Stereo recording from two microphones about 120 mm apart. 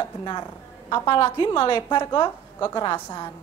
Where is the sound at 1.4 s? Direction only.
45° left (ahead or behind).